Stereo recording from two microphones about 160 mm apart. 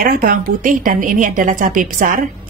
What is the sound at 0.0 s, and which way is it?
A woman's voice, 65° right (ahead or behind).